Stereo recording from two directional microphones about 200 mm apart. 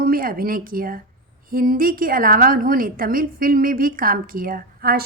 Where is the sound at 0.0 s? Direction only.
45° right (ahead or behind).